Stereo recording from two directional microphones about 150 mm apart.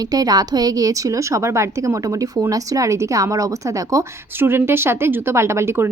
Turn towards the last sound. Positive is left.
turn(degrees=-15)  # may be behind; listen again after turning